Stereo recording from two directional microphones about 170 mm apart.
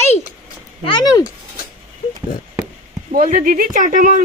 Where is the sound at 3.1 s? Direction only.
50° right (ahead or behind).